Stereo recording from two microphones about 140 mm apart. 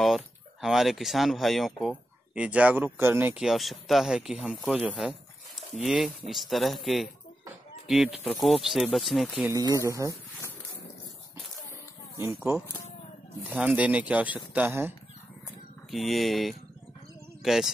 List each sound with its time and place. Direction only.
0.0 s speech: centre (ahead or behind)
3.4 s speech: centre (ahead or behind)
9.5 s speech: 25° right (ahead or behind)
13.5 s speech: 10° right (ahead or behind)
15.9 s speech: centre (ahead or behind)